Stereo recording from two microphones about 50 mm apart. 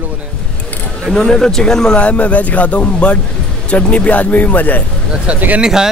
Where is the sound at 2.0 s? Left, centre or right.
Left.